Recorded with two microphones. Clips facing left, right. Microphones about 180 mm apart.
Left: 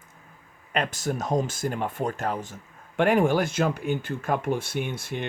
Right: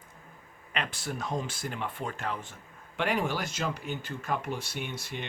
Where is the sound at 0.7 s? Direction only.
45° left (ahead or behind).